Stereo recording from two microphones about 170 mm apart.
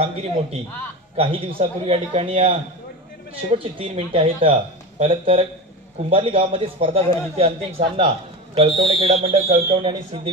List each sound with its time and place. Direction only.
0.0 s speech: 35° right (ahead or behind)